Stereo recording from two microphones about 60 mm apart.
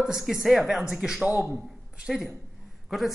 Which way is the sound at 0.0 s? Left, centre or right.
Centre.